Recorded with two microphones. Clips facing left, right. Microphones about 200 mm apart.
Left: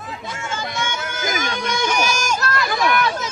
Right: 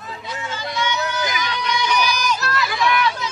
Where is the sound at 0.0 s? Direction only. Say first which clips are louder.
Even; 50° left (ahead or behind).